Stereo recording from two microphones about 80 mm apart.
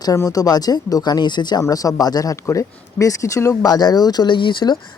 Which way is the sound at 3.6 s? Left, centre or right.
Left.